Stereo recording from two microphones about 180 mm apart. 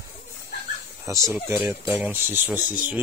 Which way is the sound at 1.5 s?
15° right (ahead or behind).